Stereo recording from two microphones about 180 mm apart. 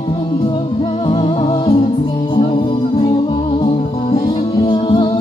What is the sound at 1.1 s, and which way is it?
Music, 30° left (ahead or behind).